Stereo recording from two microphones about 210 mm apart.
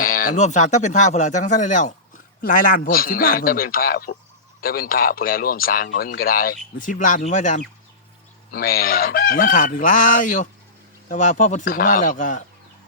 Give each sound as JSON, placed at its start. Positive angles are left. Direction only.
{"t": 0.0, "sound": "speech", "side_deg": 40}
{"t": 8.4, "sound": "speech", "side_deg": 45}